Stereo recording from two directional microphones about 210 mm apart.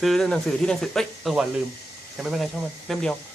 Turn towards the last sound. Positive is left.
turn(degrees=0)  # may be behind; listen again after turning